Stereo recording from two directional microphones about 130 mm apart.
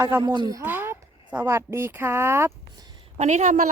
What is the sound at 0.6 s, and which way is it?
A woman's voice, 15° right (ahead or behind).